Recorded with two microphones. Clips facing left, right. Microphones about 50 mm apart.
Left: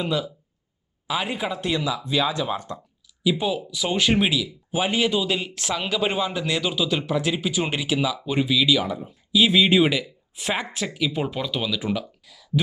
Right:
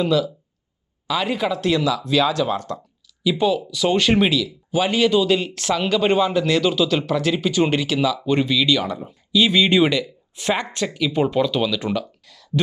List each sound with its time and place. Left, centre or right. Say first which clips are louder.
0.0 s speech: right 6 dB; left
7.3 s speech: right 6 dB; centre
12.2 s a sound: right 1 dB; centre